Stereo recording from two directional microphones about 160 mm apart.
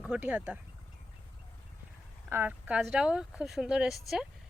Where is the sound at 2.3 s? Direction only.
10° right (ahead or behind).